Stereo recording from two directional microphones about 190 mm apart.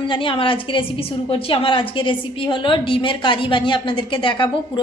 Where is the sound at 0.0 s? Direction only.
25° left (ahead or behind).